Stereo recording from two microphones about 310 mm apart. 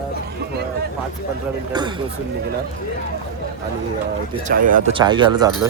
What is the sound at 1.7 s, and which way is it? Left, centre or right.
Speech, centre.